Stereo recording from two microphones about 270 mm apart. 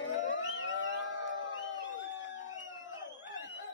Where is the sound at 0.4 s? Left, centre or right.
Left.